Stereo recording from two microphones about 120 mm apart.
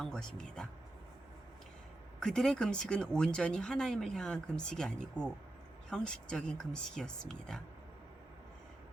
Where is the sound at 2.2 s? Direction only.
5° left (ahead or behind).